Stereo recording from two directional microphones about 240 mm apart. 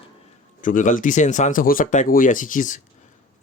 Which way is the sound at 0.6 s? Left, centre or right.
Left.